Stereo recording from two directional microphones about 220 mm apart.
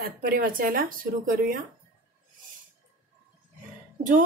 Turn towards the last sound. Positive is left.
turn(degrees=-35)  # may be behind; listen again after turning